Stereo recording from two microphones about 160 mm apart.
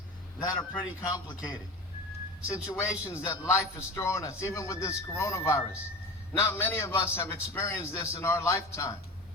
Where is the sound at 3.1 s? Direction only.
15° left (ahead or behind).